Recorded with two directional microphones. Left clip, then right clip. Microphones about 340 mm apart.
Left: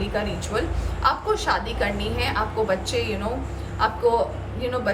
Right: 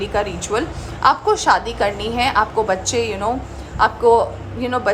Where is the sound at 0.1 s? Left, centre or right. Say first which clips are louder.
Right 7 dB; centre.